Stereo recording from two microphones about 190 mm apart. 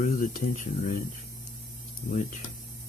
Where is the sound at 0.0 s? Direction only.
45° left (ahead or behind).